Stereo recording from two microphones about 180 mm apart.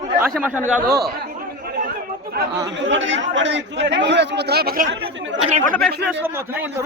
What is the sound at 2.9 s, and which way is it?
Speech, 90° right.